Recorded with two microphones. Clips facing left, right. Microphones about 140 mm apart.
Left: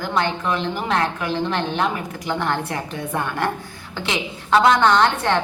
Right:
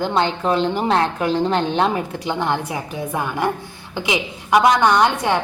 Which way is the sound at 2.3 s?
15° right (ahead or behind).